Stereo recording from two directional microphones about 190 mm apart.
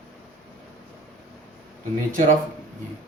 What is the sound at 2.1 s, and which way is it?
Speech, 45° right (ahead or behind).